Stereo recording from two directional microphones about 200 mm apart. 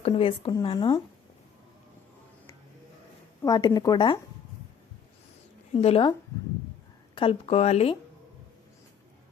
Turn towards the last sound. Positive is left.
turn(degrees=30)  # may be behind; listen again after turning